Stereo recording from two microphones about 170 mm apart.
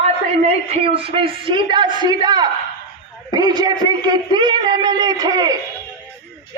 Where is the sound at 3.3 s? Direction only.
25° right (ahead or behind).